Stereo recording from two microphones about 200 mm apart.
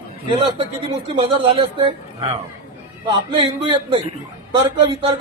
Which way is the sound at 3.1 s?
25° right (ahead or behind).